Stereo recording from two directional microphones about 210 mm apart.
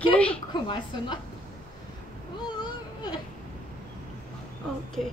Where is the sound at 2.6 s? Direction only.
20° left (ahead or behind).